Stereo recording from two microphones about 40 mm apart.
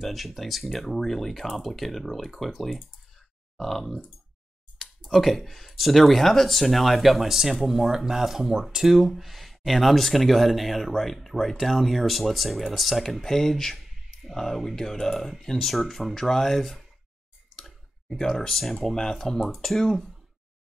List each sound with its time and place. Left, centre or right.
0.0 s speech: centre
17.6 s clicking: centre
18.2 s speech: centre
18.5 s speech: centre